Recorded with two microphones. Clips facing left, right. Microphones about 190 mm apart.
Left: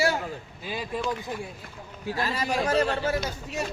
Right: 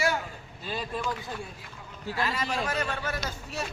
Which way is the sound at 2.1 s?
40° left (ahead or behind).